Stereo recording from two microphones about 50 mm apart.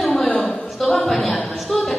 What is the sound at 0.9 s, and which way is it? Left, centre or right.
A woman's voice, centre.